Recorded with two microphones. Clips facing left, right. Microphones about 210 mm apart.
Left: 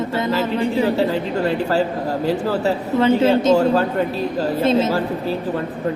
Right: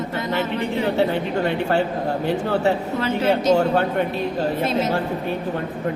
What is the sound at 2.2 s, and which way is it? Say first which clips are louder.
A man's voice: left 1 dB; 35° left (ahead or behind).